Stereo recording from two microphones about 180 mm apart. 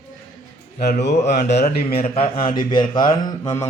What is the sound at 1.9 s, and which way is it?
Speech, 35° left (ahead or behind).